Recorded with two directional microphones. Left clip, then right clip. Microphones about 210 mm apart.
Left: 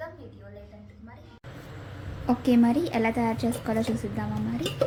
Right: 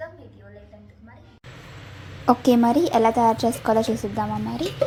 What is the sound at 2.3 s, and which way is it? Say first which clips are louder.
A woman's voice: right 6 dB; 20° right (ahead or behind).